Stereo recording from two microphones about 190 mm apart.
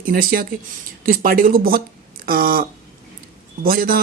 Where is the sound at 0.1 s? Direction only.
50° right (ahead or behind).